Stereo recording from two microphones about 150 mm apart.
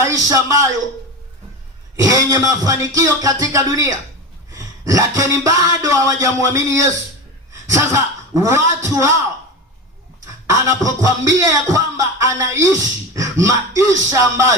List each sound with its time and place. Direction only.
0.0 s speech: 20° right (ahead or behind)
2.0 s a man's voice: 20° right (ahead or behind)
10.2 s speech: 20° right (ahead or behind)